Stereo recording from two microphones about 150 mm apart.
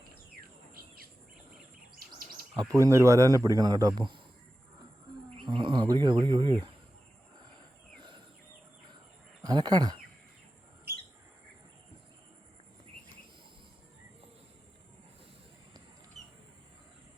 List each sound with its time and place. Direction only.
2.3 s a man's voice: 25° right (ahead or behind)
5.4 s speech: 35° right (ahead or behind)
9.4 s speech: 25° right (ahead or behind)